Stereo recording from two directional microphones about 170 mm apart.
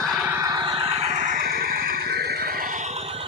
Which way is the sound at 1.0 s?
45° right (ahead or behind).